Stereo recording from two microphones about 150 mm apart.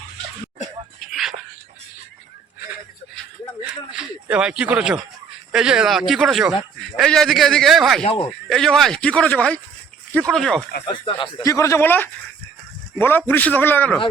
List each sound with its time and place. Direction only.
0.9 s whispering: centre (ahead or behind)
3.7 s a sound: 5° right (ahead or behind)
5.5 s speech: 5° right (ahead or behind)
8.0 s speech: 35° left (ahead or behind)
8.3 s a man's voice: 5° left (ahead or behind)
10.8 s speech: 35° left (ahead or behind)
11.4 s a man's voice: 20° left (ahead or behind)